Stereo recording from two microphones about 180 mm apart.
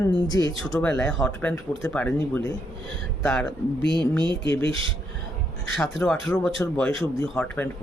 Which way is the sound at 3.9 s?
25° right (ahead or behind).